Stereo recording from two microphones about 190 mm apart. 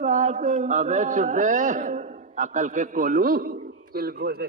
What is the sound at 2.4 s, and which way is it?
A man's voice, 40° right (ahead or behind).